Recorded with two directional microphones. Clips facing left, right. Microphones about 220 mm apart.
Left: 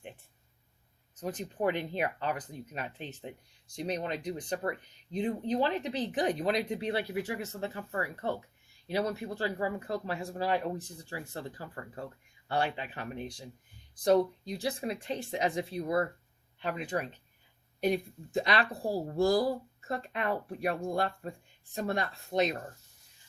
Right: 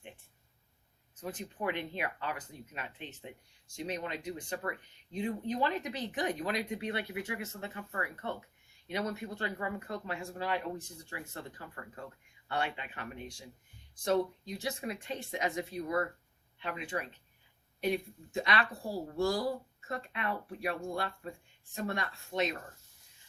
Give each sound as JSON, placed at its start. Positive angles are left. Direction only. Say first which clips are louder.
{"t": 1.1, "sound": "speech", "louder": "left 4 dB", "side_deg": 35}